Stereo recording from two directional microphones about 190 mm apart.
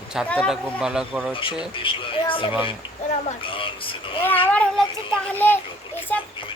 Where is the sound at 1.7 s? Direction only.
25° left (ahead or behind).